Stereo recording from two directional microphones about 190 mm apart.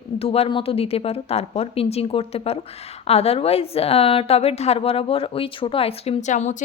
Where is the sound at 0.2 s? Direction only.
30° left (ahead or behind).